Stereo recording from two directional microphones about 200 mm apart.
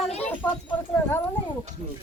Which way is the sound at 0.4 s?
10° left (ahead or behind).